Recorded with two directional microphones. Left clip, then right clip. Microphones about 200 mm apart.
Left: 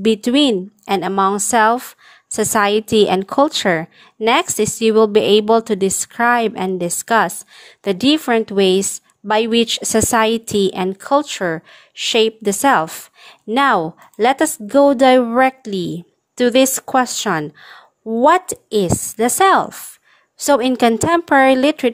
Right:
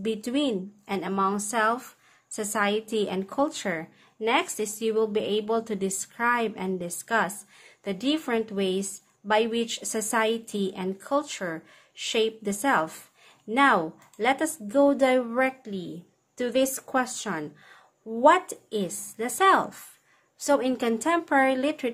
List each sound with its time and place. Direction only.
0.0 s a woman's voice: 45° left (ahead or behind)